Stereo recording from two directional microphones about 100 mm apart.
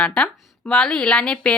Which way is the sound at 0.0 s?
10° left (ahead or behind).